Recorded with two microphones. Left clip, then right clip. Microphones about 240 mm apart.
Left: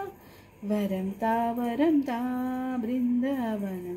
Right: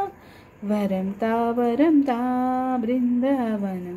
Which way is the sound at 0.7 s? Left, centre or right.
Centre.